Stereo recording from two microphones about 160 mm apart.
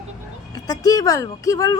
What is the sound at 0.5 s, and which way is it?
Speech, 25° left (ahead or behind).